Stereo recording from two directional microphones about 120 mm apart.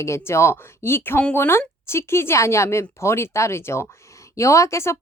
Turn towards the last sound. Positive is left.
turn(degrees=25)  # may be behind; listen again after turning